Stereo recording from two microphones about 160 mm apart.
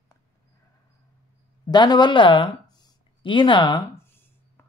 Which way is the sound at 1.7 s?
25° left (ahead or behind).